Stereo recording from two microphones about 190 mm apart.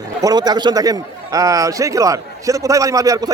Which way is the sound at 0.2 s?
20° right (ahead or behind).